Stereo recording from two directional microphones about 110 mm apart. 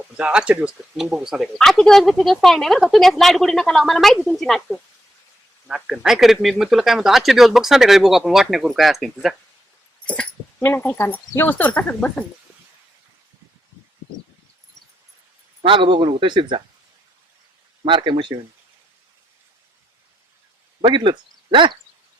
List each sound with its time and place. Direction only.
0.2 s speech: 10° right (ahead or behind)
10.1 s speech: 15° left (ahead or behind)
15.6 s speech: 50° right (ahead or behind)
17.8 s speech: 45° right (ahead or behind)
20.8 s speech: 45° right (ahead or behind)